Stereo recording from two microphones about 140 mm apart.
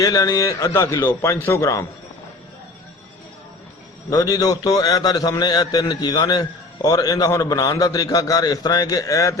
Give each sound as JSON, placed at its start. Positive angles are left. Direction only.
{"t": 0.0, "sound": "a man's voice", "side_deg": 25}
{"t": 4.1, "sound": "a man's voice", "side_deg": 25}